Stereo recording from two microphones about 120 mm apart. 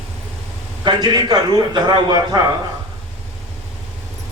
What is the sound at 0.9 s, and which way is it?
Speech, 40° right (ahead or behind).